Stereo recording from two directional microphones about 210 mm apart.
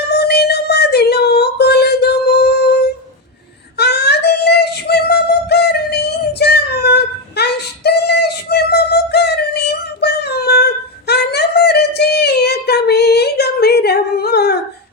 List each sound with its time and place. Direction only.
0.1 s female singing: 50° left (ahead or behind)
3.8 s synthetic singing: 50° left (ahead or behind)